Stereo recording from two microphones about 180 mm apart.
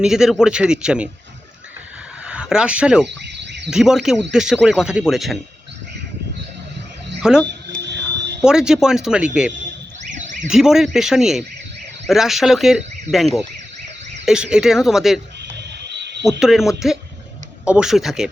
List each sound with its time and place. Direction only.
0.0 s speech: 5° right (ahead or behind)
2.2 s speech: 5° right (ahead or behind)
7.2 s speech: 5° right (ahead or behind)
7.9 s fire alarm: 70° right (ahead or behind)
8.4 s speech: 5° right (ahead or behind)
10.2 s a sound: 45° right (ahead or behind)
10.5 s speech: centre (ahead or behind)
15.5 s wild animals: 70° right (ahead or behind)
16.4 s speech: centre (ahead or behind)